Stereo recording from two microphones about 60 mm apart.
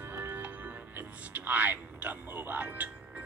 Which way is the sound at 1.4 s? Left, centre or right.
Right.